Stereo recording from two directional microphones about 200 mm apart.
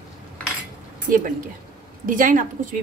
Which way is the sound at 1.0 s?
40° right (ahead or behind).